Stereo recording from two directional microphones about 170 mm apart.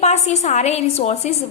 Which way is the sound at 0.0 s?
40° left (ahead or behind).